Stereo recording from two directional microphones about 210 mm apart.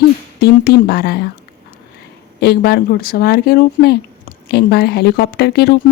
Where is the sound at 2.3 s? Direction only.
50° left (ahead or behind).